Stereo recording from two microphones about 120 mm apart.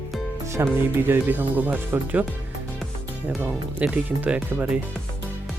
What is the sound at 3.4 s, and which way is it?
Speech, 15° right (ahead or behind).